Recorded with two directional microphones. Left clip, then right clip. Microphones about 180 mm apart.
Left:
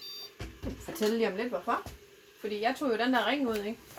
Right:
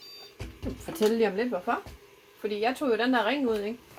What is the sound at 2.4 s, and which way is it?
Speech, 25° right (ahead or behind).